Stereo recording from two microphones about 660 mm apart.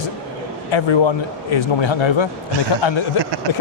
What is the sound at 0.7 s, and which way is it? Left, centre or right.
Speech, left.